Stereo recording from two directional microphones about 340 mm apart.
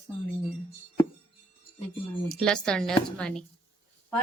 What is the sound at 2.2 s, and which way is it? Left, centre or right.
Speech, centre.